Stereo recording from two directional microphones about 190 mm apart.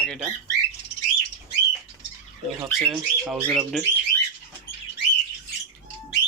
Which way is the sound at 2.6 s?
Centre (ahead or behind).